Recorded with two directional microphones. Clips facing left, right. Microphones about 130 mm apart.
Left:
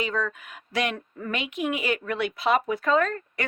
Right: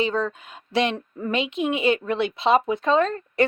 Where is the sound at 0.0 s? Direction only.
30° right (ahead or behind).